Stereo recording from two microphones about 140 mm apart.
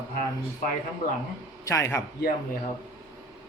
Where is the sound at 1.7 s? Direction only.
20° left (ahead or behind).